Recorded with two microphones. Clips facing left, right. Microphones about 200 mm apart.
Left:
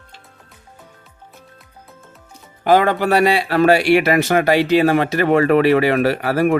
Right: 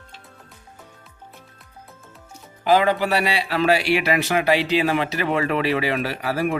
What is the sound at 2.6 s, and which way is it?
Speech, 50° left (ahead or behind).